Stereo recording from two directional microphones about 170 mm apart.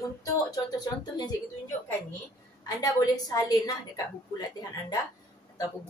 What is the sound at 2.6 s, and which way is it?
A woman's voice, 20° left (ahead or behind).